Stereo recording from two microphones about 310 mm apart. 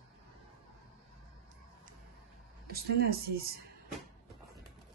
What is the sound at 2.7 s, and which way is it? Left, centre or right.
Speech, right.